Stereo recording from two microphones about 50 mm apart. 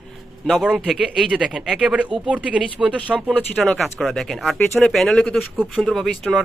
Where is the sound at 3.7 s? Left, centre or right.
Centre.